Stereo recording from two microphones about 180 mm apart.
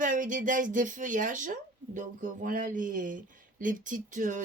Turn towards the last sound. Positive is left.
turn(degrees=-45)  # may be behind; listen again after turning